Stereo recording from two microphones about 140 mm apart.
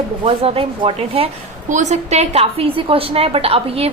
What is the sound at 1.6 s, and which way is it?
A woman's voice, 60° right (ahead or behind).